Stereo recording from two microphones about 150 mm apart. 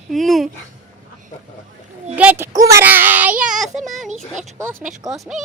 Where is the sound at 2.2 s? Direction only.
15° right (ahead or behind).